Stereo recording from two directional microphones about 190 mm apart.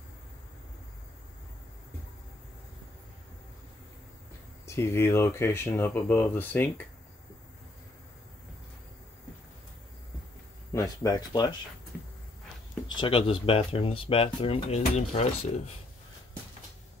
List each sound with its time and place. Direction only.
4.6 s speech: 15° left (ahead or behind)
10.7 s speech: 15° left (ahead or behind)
13.0 s speech: 30° left (ahead or behind)